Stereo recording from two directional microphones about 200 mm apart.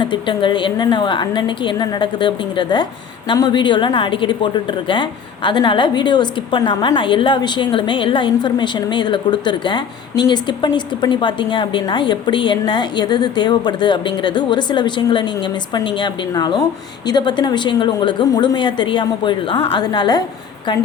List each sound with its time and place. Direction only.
0.0 s a woman's voice: 25° left (ahead or behind)